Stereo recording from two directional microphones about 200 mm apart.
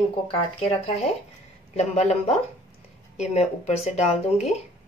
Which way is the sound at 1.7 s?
35° left (ahead or behind).